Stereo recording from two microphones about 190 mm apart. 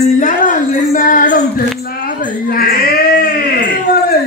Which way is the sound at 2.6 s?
50° left (ahead or behind).